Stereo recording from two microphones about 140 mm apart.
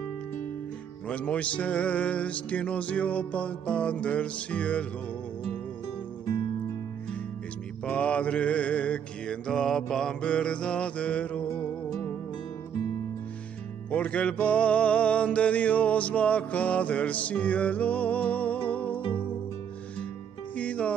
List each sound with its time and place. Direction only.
1.0 s music: 10° left (ahead or behind)
7.8 s mantra: 10° left (ahead or behind)
13.8 s music: 10° left (ahead or behind)
18.9 s music: 40° left (ahead or behind)
20.5 s music: 10° left (ahead or behind)